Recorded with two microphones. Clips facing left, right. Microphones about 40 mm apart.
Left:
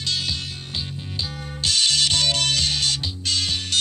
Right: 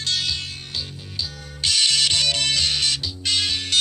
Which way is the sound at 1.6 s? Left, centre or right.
Right.